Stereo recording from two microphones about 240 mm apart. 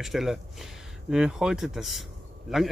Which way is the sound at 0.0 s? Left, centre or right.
Centre.